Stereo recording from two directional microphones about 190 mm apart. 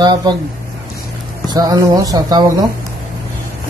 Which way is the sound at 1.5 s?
20° right (ahead or behind).